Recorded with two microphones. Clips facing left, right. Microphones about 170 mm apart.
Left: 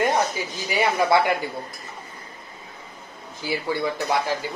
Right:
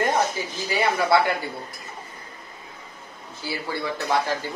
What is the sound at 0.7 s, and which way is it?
Speech, 15° left (ahead or behind).